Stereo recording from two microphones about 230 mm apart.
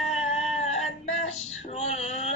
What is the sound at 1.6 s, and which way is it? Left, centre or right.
Female singing, left.